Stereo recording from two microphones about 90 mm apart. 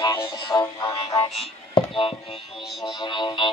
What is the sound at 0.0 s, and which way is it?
Music, 55° left (ahead or behind).